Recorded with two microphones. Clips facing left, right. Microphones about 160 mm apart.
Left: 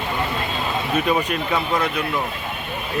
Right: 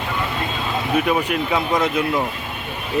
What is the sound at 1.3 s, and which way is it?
Speech, 10° right (ahead or behind).